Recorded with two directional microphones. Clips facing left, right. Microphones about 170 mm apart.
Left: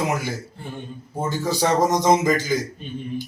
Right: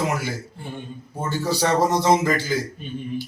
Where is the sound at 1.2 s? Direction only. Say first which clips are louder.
Left 1 dB; 15° left (ahead or behind).